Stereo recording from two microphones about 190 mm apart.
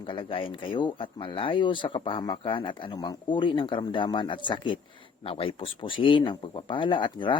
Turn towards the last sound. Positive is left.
turn(degrees=25)  # may be behind; listen again after turning